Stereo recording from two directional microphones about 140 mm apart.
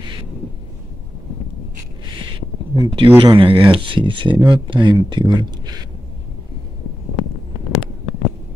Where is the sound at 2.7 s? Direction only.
35° right (ahead or behind).